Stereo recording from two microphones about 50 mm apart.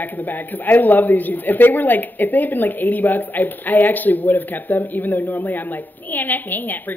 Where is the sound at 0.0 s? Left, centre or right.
Left.